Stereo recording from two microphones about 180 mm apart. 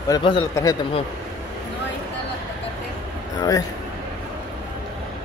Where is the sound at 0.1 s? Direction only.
30° left (ahead or behind).